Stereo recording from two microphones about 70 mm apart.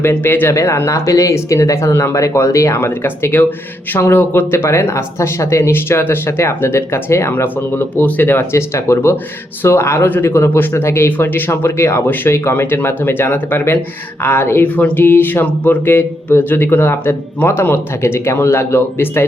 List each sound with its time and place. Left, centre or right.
0.1 s speech: left
0.5 s speech: left